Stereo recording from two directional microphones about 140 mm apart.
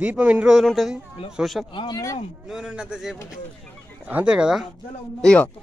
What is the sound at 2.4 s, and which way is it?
A man's voice, 5° right (ahead or behind).